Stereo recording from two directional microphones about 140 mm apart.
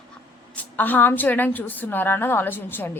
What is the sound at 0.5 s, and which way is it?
Speech, 10° left (ahead or behind).